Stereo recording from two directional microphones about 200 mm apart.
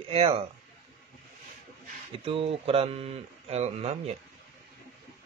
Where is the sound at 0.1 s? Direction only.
30° right (ahead or behind).